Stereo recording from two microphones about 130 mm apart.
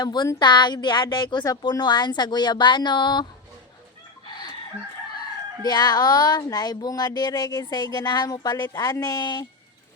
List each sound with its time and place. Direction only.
0.0 s speech: 30° left (ahead or behind)
4.3 s chicken: 35° left (ahead or behind)
5.6 s speech: 30° left (ahead or behind)